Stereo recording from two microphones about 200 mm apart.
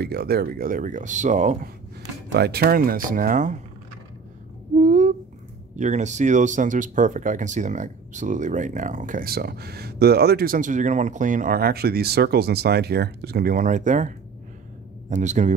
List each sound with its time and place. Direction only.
0.0 s speech: 55° right (ahead or behind); by 1.7 s 35° right (ahead or behind)
2.3 s speech: 55° right (ahead or behind)
4.7 s a sound: 35° right (ahead or behind)
5.8 s speech: 35° right (ahead or behind)